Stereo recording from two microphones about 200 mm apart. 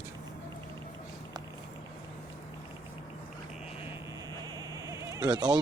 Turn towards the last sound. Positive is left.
turn(degrees=-20)  # may be behind; listen again after turning